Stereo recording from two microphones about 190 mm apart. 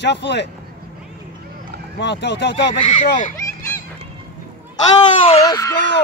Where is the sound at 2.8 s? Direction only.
40° left (ahead or behind).